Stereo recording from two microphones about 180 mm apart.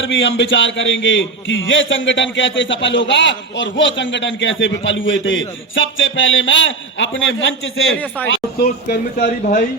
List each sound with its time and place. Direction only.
0.0 s a man's voice: 90° left
8.3 s speech: 60° left (ahead or behind); by 9.6 s 45° left (ahead or behind)